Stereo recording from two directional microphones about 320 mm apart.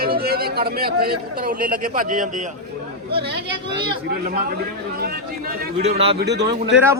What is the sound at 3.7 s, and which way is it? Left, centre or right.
Speech, centre.